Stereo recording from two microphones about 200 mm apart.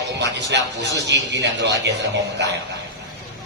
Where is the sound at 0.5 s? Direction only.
60° right (ahead or behind).